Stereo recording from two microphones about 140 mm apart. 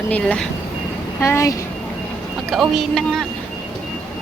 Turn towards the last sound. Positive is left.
turn(degrees=0)  # may be behind; listen again after turning